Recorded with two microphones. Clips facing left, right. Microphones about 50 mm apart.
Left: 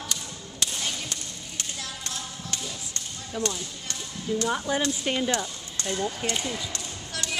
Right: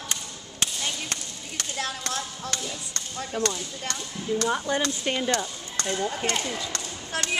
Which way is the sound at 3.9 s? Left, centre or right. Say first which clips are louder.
Right 3 dB; right.